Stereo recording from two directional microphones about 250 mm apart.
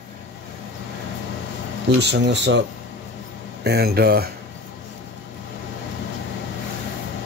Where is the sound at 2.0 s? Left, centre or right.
Right.